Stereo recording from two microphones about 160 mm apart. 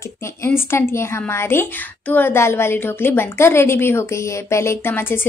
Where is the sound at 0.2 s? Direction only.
15° left (ahead or behind).